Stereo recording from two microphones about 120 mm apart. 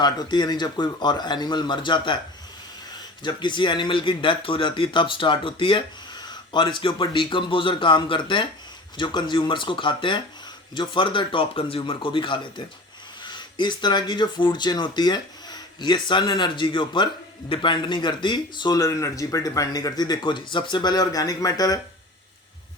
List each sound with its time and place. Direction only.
0.0 s speech: 35° left (ahead or behind)
3.2 s speech: 40° left (ahead or behind)